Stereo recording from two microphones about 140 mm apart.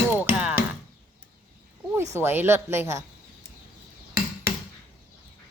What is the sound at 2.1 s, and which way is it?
Speech, 15° right (ahead or behind).